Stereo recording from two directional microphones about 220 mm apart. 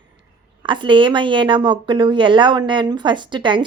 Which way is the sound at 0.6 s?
20° right (ahead or behind).